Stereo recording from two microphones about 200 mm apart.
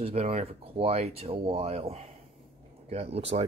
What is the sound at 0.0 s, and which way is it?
Speech, 30° right (ahead or behind).